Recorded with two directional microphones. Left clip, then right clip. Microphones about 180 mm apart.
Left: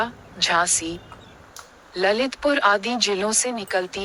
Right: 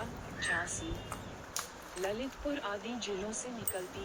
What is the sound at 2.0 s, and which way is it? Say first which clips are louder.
A woman's voice: left 17 dB; 65° left (ahead or behind).